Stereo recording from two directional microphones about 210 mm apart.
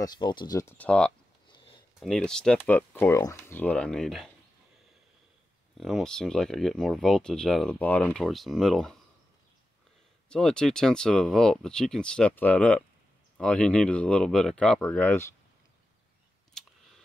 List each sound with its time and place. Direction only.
0.0 s speech: 20° left (ahead or behind); by 4.3 s centre (ahead or behind)
5.8 s speech: centre (ahead or behind)
10.3 s speech: 5° left (ahead or behind)